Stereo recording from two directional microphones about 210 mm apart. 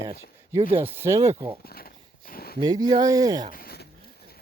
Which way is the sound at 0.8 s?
10° right (ahead or behind).